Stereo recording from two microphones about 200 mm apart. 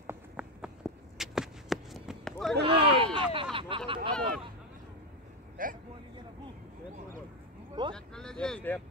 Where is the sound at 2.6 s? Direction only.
25° right (ahead or behind).